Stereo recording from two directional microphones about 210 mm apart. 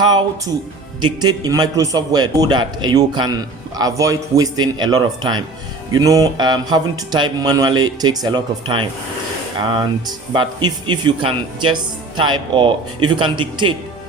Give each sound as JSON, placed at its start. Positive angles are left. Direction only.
{"t": 0.0, "sound": "a man's voice", "side_deg": -20}